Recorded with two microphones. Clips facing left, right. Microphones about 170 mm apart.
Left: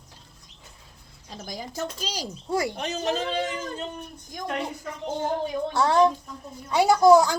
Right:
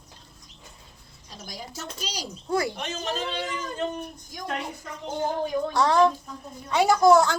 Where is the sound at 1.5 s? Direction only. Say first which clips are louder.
Left 6 dB; 50° left (ahead or behind).